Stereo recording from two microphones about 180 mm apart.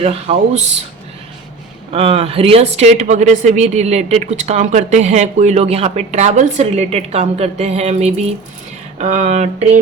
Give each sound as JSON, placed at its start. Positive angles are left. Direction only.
{"t": 0.0, "sound": "a woman's voice", "side_deg": -35}
{"t": 1.9, "sound": "a woman's voice", "side_deg": -35}